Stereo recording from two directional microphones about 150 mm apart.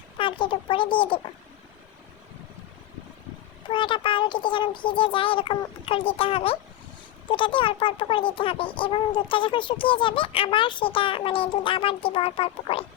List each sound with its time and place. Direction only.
0.2 s speech: 35° left (ahead or behind)
3.7 s a child's voice: 35° left (ahead or behind)